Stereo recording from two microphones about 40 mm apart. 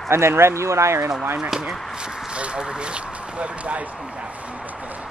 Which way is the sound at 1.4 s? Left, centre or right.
Centre.